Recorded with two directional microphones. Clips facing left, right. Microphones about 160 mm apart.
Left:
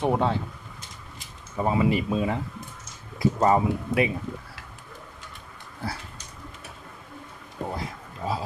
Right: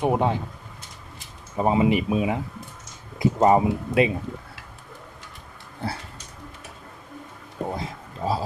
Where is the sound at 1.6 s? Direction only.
20° right (ahead or behind).